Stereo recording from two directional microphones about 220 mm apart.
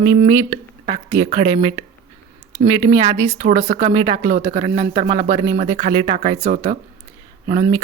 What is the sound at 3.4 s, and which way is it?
Speech, 35° right (ahead or behind).